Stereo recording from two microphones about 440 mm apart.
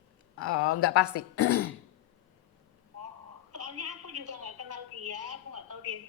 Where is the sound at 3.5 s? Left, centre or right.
Right.